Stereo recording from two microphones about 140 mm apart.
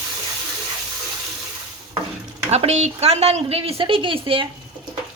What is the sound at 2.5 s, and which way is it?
A woman's voice, 50° right (ahead or behind).